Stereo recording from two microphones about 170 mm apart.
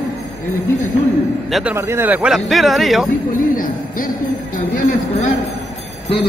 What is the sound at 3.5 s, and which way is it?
Music, 55° left (ahead or behind).